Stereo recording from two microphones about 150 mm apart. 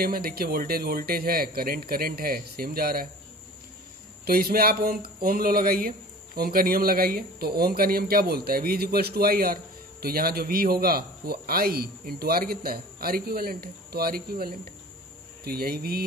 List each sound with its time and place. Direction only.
0.0 s speech: 85° right
4.2 s speech: 90° right
15.4 s speech: 90° right